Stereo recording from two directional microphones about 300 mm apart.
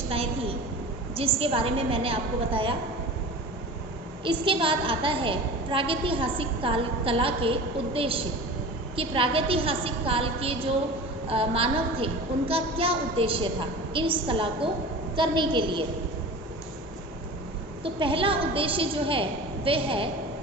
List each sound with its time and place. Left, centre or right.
0.1 s a sound: centre
1.4 s a woman's voice: centre
4.2 s a woman's voice: centre
17.8 s a woman's voice: centre